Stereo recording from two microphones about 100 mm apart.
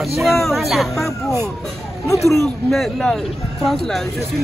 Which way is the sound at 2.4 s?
5° left (ahead or behind).